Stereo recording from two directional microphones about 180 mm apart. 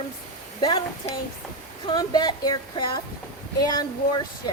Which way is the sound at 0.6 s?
30° left (ahead or behind).